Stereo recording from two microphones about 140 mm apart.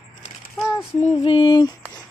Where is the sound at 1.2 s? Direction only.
35° left (ahead or behind).